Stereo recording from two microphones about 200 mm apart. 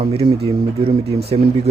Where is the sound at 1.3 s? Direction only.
25° right (ahead or behind).